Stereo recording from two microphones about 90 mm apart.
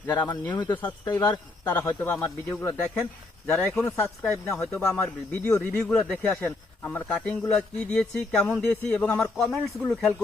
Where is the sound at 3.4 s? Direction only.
20° left (ahead or behind).